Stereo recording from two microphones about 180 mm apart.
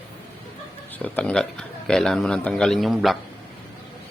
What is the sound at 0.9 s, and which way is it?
A man's voice, 10° left (ahead or behind).